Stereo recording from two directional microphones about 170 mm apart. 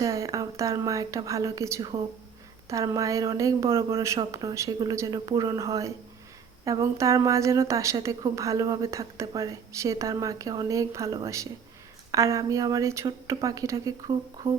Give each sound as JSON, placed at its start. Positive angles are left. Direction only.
{"t": 0.0, "sound": "a woman's voice", "side_deg": -20}